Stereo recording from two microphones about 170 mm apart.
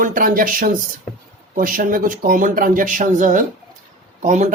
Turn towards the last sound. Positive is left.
turn(degrees=-45)  # may be behind; listen again after turning